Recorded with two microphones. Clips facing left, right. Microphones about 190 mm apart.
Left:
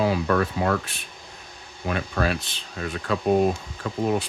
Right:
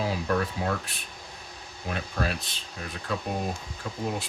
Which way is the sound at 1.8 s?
75° left (ahead or behind).